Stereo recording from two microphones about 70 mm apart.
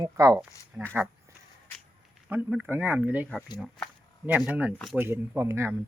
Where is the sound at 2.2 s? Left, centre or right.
Centre.